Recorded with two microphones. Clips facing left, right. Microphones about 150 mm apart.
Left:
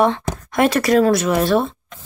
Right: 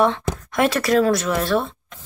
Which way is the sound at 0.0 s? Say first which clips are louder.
Left 2 dB; centre (ahead or behind).